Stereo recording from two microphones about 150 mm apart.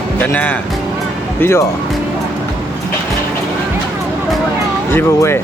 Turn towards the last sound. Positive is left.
turn(degrees=15)  # may be behind; listen again after turning